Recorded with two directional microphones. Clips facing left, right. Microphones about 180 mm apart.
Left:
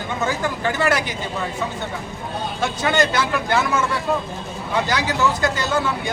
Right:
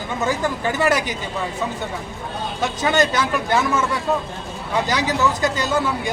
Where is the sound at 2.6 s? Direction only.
15° right (ahead or behind).